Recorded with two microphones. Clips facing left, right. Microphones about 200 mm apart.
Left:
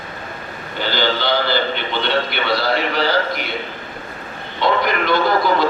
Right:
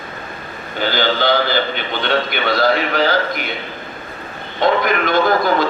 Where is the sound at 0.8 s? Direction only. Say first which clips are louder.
Right 2 dB; 50° right (ahead or behind).